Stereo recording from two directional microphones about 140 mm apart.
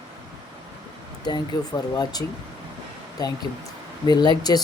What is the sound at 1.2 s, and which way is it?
Speech, 30° left (ahead or behind).